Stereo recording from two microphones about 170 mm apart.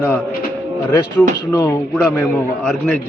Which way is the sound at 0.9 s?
15° left (ahead or behind).